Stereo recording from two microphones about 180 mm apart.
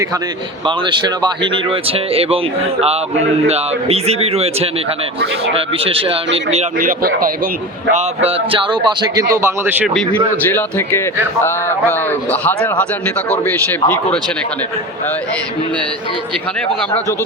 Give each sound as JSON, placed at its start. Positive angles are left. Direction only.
{"t": 0.6, "sound": "a man's voice", "side_deg": -25}
{"t": 6.7, "sound": "speech", "side_deg": -50}
{"t": 7.9, "sound": "a man's voice", "side_deg": -35}
{"t": 10.4, "sound": "a man's voice", "side_deg": 10}
{"t": 13.8, "sound": "a man's voice", "side_deg": 10}